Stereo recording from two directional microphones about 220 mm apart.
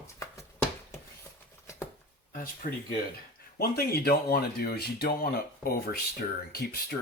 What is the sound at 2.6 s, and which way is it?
Speech, 35° left (ahead or behind).